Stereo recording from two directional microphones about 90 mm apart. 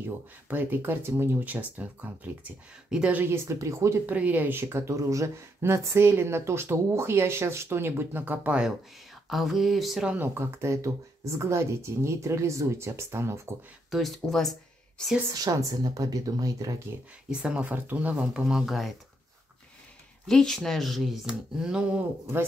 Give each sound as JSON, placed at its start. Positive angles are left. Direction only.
{"t": 0.5, "sound": "speech", "side_deg": -20}
{"t": 3.2, "sound": "speech", "side_deg": -30}
{"t": 4.0, "sound": "speech", "side_deg": -20}
{"t": 9.3, "sound": "speech", "side_deg": 0}
{"t": 10.1, "sound": "speech", "side_deg": -25}
{"t": 13.8, "sound": "speech", "side_deg": 0}
{"t": 15.3, "sound": "speech", "side_deg": -45}
{"t": 17.3, "sound": "speech", "side_deg": -10}
{"t": 20.2, "sound": "speech", "side_deg": 5}